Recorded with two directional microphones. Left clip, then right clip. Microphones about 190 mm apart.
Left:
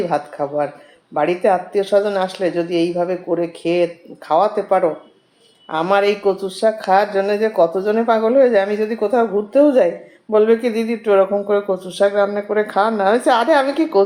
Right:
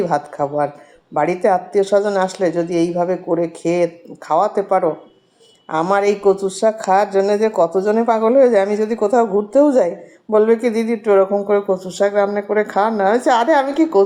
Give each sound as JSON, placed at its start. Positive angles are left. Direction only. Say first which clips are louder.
{"t": 0.1, "sound": "speech", "louder": "right 1 dB", "side_deg": -30}